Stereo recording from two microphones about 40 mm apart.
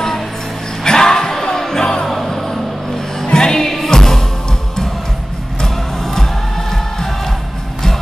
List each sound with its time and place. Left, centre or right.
0.8 s music: centre
2.0 s music: centre
5.6 s music: centre